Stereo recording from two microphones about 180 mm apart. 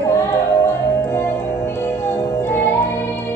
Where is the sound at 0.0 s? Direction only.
15° left (ahead or behind).